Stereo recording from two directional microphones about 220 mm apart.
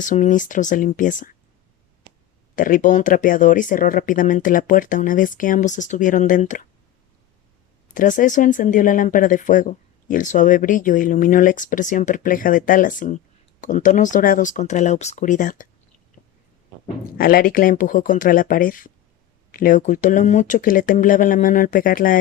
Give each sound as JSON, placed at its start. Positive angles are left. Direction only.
{"t": 0.0, "sound": "speech", "side_deg": 35}
{"t": 2.6, "sound": "speech", "side_deg": 35}
{"t": 7.9, "sound": "speech", "side_deg": 35}
{"t": 17.2, "sound": "speech", "side_deg": 40}